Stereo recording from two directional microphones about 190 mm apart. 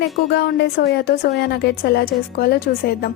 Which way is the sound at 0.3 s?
60° left (ahead or behind).